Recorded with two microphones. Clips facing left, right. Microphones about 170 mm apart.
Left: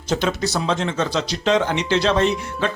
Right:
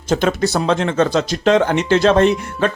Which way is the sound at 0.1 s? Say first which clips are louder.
Right 5 dB; 50° right (ahead or behind).